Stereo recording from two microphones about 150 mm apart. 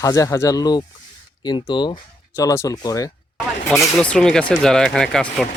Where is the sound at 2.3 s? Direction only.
20° left (ahead or behind).